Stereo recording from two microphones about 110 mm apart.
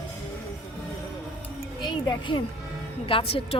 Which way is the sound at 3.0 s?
55° left (ahead or behind).